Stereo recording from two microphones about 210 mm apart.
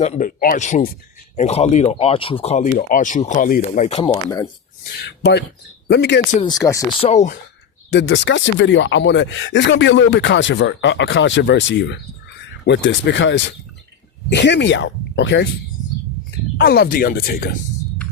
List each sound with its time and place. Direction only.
0.0 s speech: 35° left (ahead or behind)
4.1 s speech: 15° left (ahead or behind)
5.0 s speech: 55° left (ahead or behind)
6.4 s speech: 15° left (ahead or behind)
7.0 s speech: 30° left (ahead or behind)
7.9 s speech: 55° left (ahead or behind)
16.6 s speech: 50° left (ahead or behind)